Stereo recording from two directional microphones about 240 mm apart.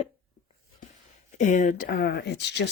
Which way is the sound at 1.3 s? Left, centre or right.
Left.